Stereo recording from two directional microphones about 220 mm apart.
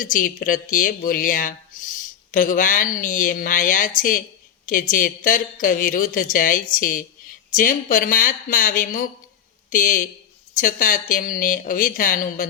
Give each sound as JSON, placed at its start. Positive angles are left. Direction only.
{"t": 0.0, "sound": "a man's voice", "side_deg": 40}